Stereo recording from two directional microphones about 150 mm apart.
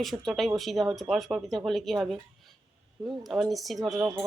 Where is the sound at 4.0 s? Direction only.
20° right (ahead or behind).